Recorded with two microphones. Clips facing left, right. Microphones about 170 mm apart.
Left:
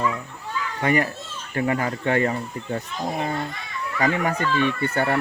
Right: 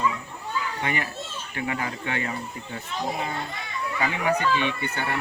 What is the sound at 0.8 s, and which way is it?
Speech, 40° left (ahead or behind).